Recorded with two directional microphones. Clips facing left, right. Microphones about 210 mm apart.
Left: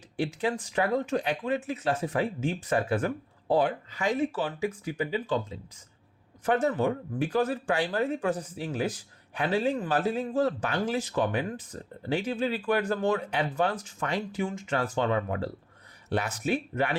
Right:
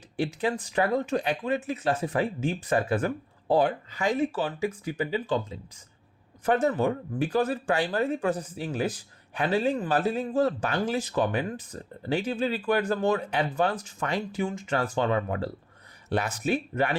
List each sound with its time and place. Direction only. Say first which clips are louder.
0.2 s speech: right 1 dB; 40° right (ahead or behind)
6.4 s speech: right 1 dB; 40° right (ahead or behind)